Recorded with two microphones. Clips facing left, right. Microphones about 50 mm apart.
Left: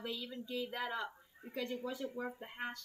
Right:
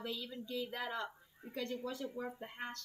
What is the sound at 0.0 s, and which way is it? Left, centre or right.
Speech, centre.